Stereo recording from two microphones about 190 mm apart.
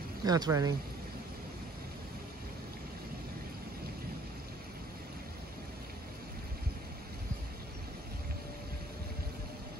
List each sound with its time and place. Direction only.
0.2 s speech: 20° right (ahead or behind)